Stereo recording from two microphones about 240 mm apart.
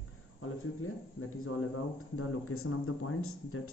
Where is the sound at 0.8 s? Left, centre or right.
Left.